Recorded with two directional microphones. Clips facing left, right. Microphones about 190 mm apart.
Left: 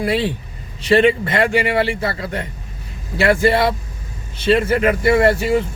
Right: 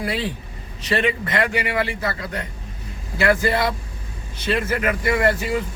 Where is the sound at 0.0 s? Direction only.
30° left (ahead or behind).